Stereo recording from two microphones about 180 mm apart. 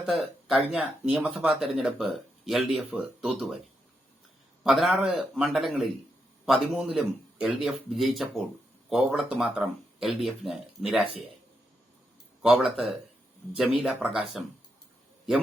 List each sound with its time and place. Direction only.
0.0 s speech: centre (ahead or behind)
4.6 s speech: centre (ahead or behind)
12.4 s speech: 5° right (ahead or behind)